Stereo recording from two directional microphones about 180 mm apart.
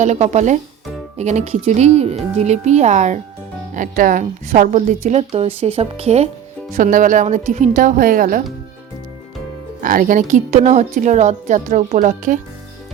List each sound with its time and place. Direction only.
0.0 s a woman's voice: 40° right (ahead or behind)
6.7 s a woman's voice: 45° right (ahead or behind)
9.8 s a woman's voice: 50° right (ahead or behind)